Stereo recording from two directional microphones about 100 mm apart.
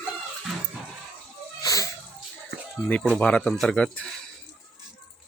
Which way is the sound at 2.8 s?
10° left (ahead or behind).